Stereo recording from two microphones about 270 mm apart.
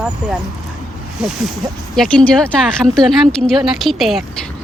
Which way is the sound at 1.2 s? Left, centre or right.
Centre.